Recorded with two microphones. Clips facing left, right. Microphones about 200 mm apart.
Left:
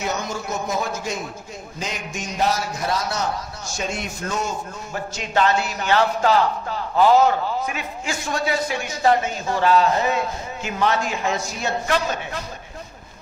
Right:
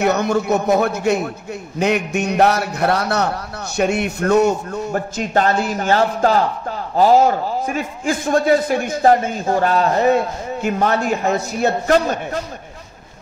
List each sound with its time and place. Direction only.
0.0 s a man's voice: 60° right (ahead or behind)
11.9 s a man's voice: 40° right (ahead or behind)